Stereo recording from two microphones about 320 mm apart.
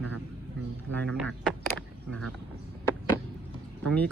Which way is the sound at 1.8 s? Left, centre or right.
Centre.